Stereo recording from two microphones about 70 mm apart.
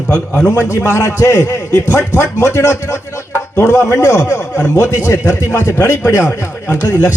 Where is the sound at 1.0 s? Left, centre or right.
Left.